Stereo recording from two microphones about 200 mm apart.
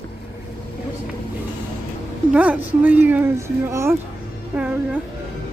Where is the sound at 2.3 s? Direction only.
5° right (ahead or behind).